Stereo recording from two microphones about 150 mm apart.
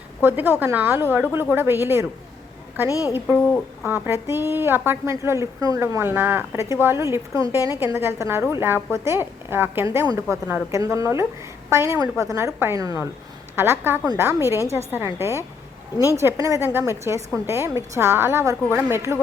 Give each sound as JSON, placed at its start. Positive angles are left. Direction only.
{"t": 0.2, "sound": "a woman's voice", "side_deg": -15}
{"t": 3.8, "sound": "a woman's voice", "side_deg": -15}